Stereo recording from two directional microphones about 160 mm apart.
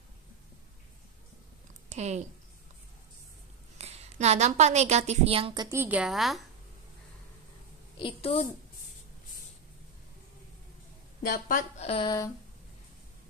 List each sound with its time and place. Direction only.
1.9 s a woman's voice: 45° right (ahead or behind)
3.7 s a woman's voice: 40° right (ahead or behind); by 5.8 s 25° right (ahead or behind)
5.8 s a woman's voice: 10° right (ahead or behind)
8.0 s a woman's voice: 35° left (ahead or behind)
11.2 s speech: 60° left (ahead or behind)
11.8 s a woman's voice: 35° left (ahead or behind)